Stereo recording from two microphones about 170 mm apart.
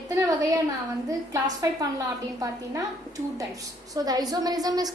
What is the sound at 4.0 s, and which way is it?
Speech, 20° right (ahead or behind).